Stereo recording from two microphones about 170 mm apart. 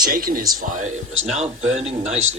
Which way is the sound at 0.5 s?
45° right (ahead or behind).